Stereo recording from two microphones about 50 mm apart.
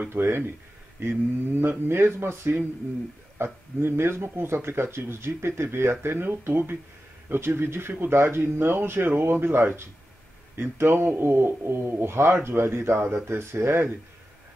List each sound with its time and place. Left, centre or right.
0.1 s speech: right